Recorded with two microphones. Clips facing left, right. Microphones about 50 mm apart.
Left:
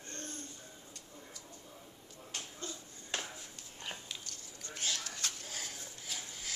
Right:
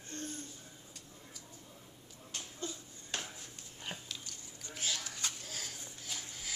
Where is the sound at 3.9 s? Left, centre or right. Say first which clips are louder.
Right 2 dB; centre.